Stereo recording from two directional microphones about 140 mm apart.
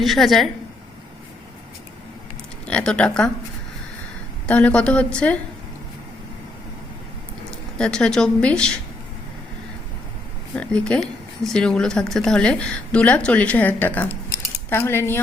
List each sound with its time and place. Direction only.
0.0 s speech: centre (ahead or behind)
2.6 s a woman's voice: 5° left (ahead or behind)
4.4 s a woman's voice: 10° left (ahead or behind)
7.8 s speech: 5° left (ahead or behind)
10.5 s a woman's voice: 5° left (ahead or behind)
14.3 s cutlery: 20° left (ahead or behind)